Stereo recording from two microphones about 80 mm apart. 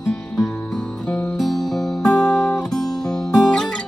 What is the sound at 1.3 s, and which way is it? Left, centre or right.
Music, centre.